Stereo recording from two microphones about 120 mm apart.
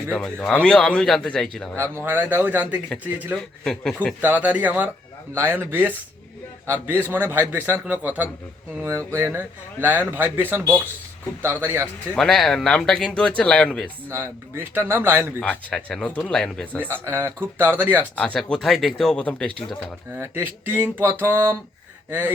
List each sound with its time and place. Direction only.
0.1 s speech: 5° left (ahead or behind)
1.7 s speech: 20° right (ahead or behind)
3.6 s speech: 5° left (ahead or behind)
4.2 s speech: 15° right (ahead or behind)
12.1 s speech: 5° left (ahead or behind)
14.1 s speech: 20° right (ahead or behind)
15.4 s speech: 10° left (ahead or behind)
16.8 s speech: 20° right (ahead or behind)
18.2 s speech: 10° left (ahead or behind)
20.1 s speech: 20° right (ahead or behind)